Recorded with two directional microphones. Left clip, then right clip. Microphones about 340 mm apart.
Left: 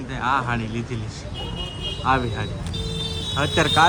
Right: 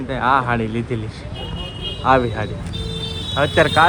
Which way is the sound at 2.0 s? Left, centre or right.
Centre.